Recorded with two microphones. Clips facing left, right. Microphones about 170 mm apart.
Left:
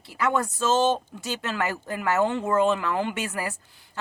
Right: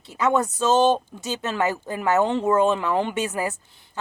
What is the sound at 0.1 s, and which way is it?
Speech, 20° right (ahead or behind).